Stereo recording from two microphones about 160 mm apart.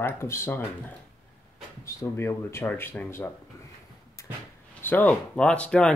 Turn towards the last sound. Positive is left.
turn(degrees=5)  # may be behind; listen again after turning